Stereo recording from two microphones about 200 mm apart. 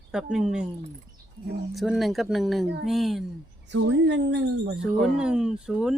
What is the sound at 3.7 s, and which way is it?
Speech, 60° right (ahead or behind).